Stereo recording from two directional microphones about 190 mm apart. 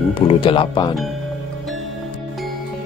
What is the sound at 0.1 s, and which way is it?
Speech, 30° left (ahead or behind).